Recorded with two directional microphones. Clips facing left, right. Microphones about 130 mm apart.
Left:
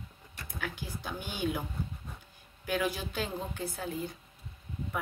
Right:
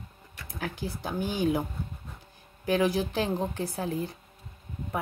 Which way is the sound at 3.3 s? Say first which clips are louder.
Right 7 dB; 40° right (ahead or behind).